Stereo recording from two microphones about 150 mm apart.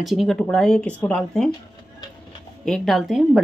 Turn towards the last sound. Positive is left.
turn(degrees=0)  # may be behind; listen again after turning